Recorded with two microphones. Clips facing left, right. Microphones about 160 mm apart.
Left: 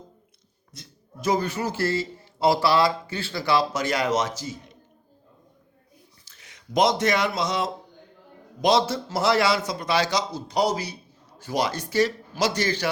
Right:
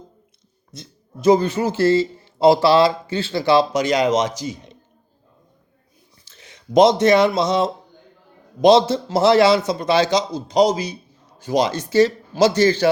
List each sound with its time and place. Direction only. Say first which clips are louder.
0.7 s speech: right 7 dB; 25° right (ahead or behind)
6.2 s a man's voice: right 8 dB; 25° right (ahead or behind)